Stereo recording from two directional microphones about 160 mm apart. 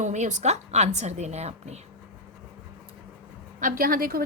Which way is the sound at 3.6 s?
60° right (ahead or behind).